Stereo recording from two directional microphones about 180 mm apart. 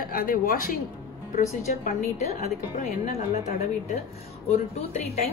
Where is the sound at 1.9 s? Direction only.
45° left (ahead or behind).